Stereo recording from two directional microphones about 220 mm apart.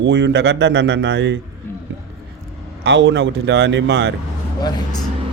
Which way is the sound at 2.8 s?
50° right (ahead or behind).